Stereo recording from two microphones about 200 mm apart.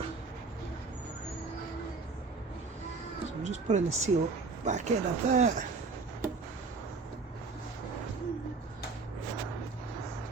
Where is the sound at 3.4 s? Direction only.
35° right (ahead or behind).